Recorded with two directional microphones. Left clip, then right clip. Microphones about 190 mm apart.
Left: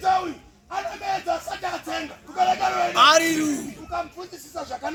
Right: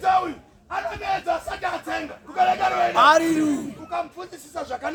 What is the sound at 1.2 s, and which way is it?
A man's voice, 10° right (ahead or behind).